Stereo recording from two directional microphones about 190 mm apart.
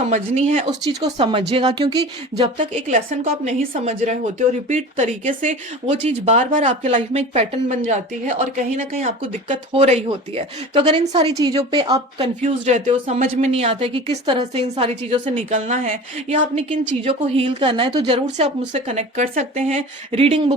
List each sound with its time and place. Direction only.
0.0 s speech: 40° right (ahead or behind)
0.7 s speech: 20° right (ahead or behind)
2.6 s speech: 40° right (ahead or behind)
5.9 s speech: 30° right (ahead or behind)
12.4 s speech: 40° right (ahead or behind)